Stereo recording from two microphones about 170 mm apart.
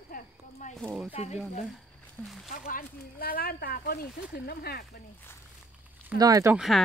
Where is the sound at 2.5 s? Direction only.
55° left (ahead or behind).